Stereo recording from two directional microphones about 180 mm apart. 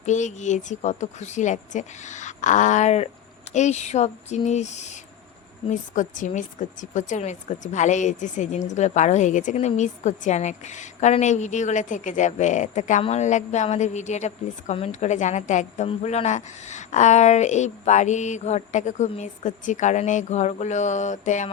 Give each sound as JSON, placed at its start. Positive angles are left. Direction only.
{"t": 0.0, "sound": "a woman's voice", "side_deg": 40}